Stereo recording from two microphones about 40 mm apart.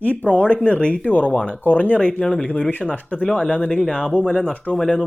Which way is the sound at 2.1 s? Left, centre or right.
Centre.